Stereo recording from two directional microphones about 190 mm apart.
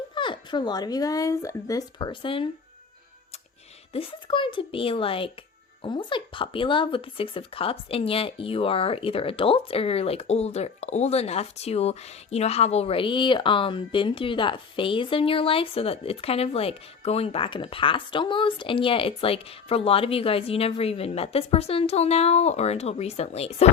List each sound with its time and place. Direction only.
0.1 s speech: 25° left (ahead or behind)
3.9 s speech: 30° left (ahead or behind)